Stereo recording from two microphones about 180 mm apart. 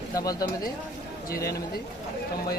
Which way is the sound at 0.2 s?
20° left (ahead or behind).